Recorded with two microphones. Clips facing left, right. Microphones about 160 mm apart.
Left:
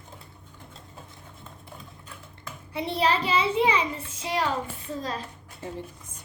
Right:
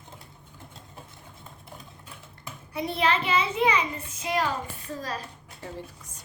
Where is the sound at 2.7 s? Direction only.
30° left (ahead or behind).